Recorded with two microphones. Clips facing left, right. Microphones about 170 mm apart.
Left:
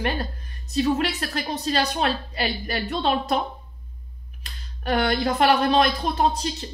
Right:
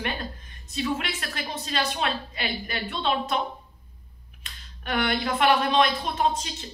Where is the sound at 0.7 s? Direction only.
40° left (ahead or behind).